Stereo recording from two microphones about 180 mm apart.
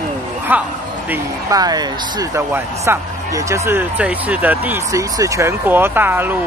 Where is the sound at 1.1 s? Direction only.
20° right (ahead or behind).